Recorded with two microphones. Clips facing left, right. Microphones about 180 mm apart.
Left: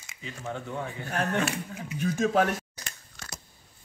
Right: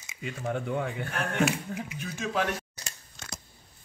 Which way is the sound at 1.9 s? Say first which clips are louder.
Left 8 dB; 45° left (ahead or behind).